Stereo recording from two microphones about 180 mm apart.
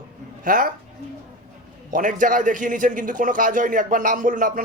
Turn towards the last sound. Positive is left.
turn(degrees=-50)  # may be behind; listen again after turning